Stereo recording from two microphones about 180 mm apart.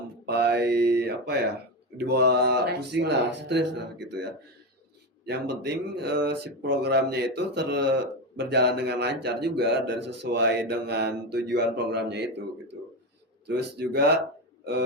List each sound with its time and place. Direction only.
0.3 s a man's voice: 65° right (ahead or behind)
13.6 s speech: 65° right (ahead or behind)